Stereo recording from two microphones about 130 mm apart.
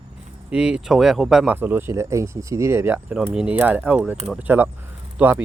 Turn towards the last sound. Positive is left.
turn(degrees=-15)  # may be behind; listen again after turning